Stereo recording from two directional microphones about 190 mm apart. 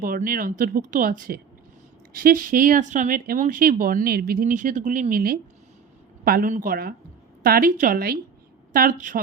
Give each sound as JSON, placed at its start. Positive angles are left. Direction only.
{"t": 0.0, "sound": "speech", "side_deg": -50}